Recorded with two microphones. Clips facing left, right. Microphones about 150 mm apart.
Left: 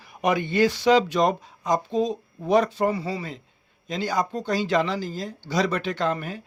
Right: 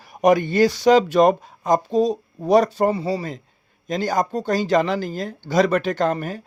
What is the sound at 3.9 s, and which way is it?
Speech, 45° right (ahead or behind).